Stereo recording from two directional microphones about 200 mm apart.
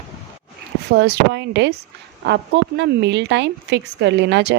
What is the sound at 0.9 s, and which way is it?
A woman's voice, 55° right (ahead or behind).